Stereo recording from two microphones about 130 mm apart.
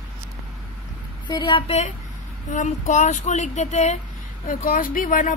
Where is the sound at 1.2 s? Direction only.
40° left (ahead or behind).